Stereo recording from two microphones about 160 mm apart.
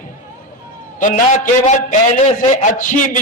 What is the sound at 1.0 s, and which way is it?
A man's voice, 55° left (ahead or behind).